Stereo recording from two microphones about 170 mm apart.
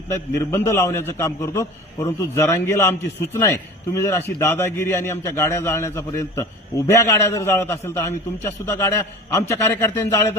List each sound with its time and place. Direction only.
0.1 s a man's voice: 15° left (ahead or behind)